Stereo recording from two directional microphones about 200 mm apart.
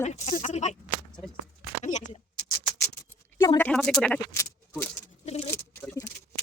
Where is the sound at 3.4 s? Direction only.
15° left (ahead or behind).